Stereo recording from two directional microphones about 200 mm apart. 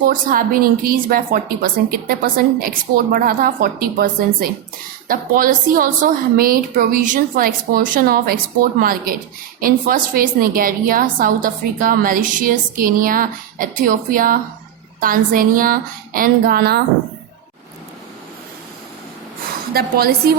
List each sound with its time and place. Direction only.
0.0 s a woman's voice: 45° right (ahead or behind)
19.7 s a woman's voice: 50° right (ahead or behind)